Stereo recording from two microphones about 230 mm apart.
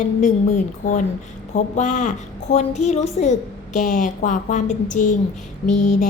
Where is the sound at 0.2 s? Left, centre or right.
Left.